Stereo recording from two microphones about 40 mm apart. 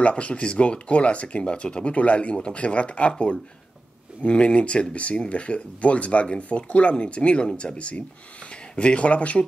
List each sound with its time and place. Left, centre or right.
0.0 s speech: left